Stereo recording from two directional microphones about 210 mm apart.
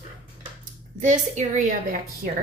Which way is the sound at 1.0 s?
35° right (ahead or behind).